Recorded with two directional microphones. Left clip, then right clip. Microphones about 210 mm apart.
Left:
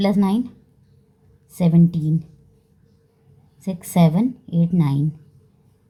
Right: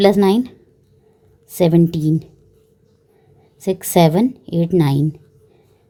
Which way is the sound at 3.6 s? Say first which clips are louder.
Right 8 dB; 40° right (ahead or behind).